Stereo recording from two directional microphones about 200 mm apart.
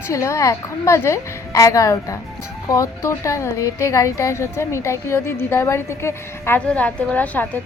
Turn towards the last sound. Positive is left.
turn(degrees=10)  # may be behind; listen again after turning